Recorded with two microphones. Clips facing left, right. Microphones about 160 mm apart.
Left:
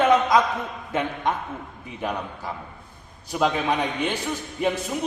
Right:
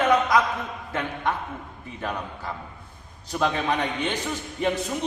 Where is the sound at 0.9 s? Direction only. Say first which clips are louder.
Left 3 dB; 20° left (ahead or behind).